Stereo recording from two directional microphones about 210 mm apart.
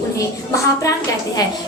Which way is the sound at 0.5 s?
15° left (ahead or behind).